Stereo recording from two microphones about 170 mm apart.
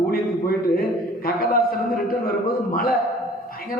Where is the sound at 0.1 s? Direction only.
60° left (ahead or behind).